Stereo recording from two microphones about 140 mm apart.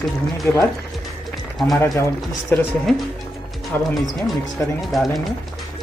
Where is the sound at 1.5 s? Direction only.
Centre (ahead or behind).